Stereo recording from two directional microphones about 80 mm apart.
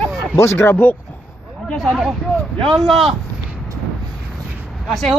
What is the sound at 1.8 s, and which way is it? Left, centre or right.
Speech, centre.